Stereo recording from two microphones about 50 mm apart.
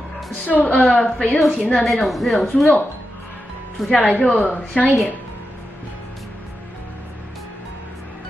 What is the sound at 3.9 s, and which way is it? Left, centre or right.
Speech, centre.